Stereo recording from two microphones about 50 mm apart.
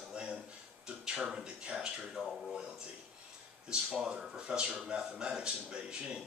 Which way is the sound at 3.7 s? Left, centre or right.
Centre.